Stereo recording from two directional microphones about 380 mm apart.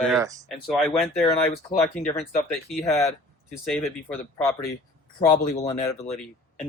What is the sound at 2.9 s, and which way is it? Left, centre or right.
Speech, centre.